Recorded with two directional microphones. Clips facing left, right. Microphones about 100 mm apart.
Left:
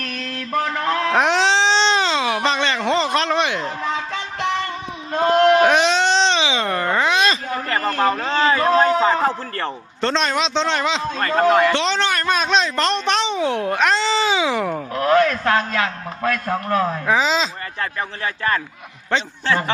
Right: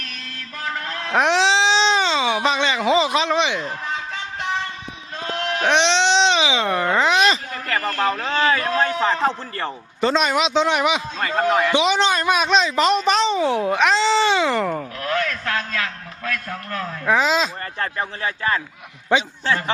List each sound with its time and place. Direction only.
0.0 s mantra: 60° left (ahead or behind); by 1.1 s 90° left
1.1 s baby cry: centre (ahead or behind)
3.8 s music: 90° left
5.1 s a sound: 65° left (ahead or behind)
5.6 s a sound: 5° left (ahead or behind); by 7.3 s 15° right (ahead or behind)
7.5 s a sound: 30° left (ahead or behind)
8.1 s speech: 15° left (ahead or behind)
9.6 s a man's voice: 5° right (ahead or behind)
14.9 s a man's voice: 35° left (ahead or behind)
17.1 s speech: centre (ahead or behind)
18.2 s a man's voice: 15° right (ahead or behind)